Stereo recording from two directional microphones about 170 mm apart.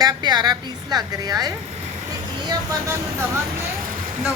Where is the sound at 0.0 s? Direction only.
25° right (ahead or behind).